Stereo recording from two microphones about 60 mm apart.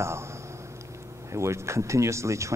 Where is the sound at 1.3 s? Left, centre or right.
Right.